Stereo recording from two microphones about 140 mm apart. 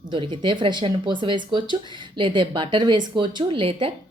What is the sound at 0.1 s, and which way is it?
A woman's voice, 35° right (ahead or behind).